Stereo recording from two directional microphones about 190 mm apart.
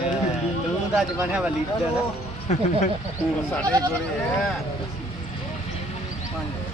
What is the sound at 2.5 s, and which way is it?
Speech, 40° left (ahead or behind).